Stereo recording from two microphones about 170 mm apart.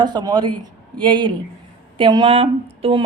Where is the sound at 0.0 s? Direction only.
25° right (ahead or behind).